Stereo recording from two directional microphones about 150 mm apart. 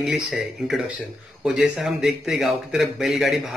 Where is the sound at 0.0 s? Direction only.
Centre (ahead or behind).